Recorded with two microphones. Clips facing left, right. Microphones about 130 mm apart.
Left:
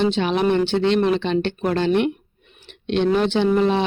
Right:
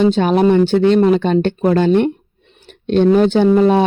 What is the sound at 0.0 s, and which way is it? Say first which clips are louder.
Speech: right 6 dB; 45° right (ahead or behind).